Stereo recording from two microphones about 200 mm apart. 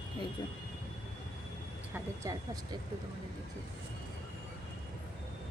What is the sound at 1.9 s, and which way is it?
Speech, 15° right (ahead or behind).